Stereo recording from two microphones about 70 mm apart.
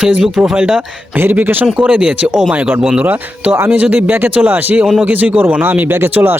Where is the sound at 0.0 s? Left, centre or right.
Centre.